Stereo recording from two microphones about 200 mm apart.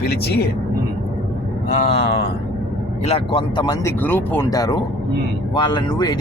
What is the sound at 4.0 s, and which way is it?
A man's voice, 10° left (ahead or behind).